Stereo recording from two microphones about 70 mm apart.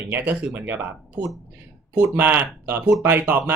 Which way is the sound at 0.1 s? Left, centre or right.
Right.